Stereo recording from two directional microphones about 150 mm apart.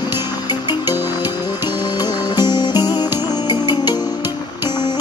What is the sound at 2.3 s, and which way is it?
Music, 30° left (ahead or behind).